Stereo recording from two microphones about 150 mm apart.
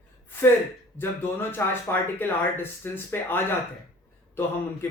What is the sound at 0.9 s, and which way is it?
Speech, 15° left (ahead or behind).